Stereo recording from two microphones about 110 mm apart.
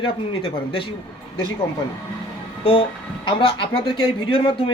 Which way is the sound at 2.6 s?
50° left (ahead or behind).